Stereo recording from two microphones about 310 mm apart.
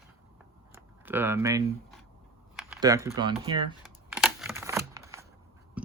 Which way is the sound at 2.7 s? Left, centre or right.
Centre.